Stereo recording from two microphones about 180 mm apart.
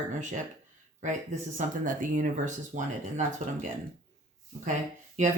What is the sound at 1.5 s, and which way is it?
Speech, 45° right (ahead or behind).